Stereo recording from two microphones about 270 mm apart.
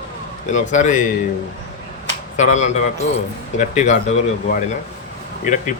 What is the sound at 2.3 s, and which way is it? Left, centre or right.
Speech, left.